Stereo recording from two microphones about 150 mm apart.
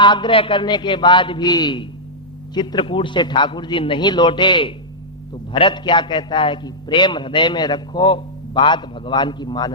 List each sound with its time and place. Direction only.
0.0 s a man's voice: 30° left (ahead or behind)